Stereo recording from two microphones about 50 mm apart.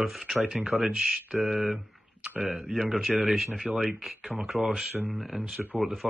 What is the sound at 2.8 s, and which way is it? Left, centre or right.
Speech, centre.